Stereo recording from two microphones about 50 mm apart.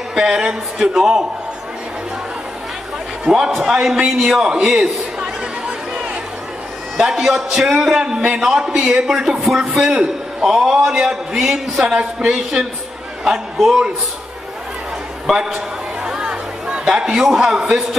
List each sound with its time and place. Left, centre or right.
0.1 s a man's voice: centre
3.3 s a man's voice: centre
7.0 s a man's voice: centre
11.8 s speech: right
12.2 s a man's voice: centre
15.3 s a man's voice: centre
16.0 s chatter: centre
16.8 s a man's voice: centre